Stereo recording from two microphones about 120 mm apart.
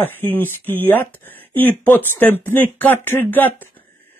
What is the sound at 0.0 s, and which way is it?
Mantra, 15° left (ahead or behind).